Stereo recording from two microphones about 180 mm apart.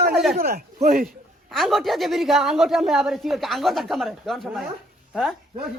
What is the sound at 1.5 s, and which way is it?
A man's voice, centre (ahead or behind).